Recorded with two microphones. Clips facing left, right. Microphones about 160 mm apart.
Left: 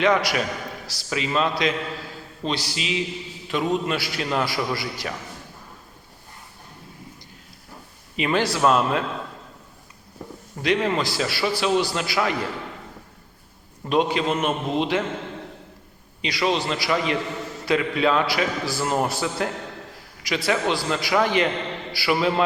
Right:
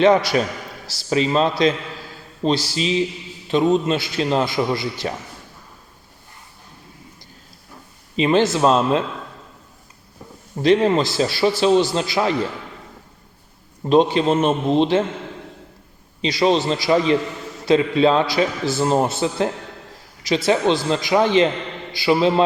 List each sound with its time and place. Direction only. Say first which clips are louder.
0.0 s a man's voice: right 6 dB; 30° right (ahead or behind)
8.1 s a man's voice: right 6 dB; 25° right (ahead or behind)
10.6 s a man's voice: right 7 dB; 30° right (ahead or behind)
13.9 s a man's voice: right 6 dB; 30° right (ahead or behind)
16.2 s a man's voice: right 6 dB; 30° right (ahead or behind)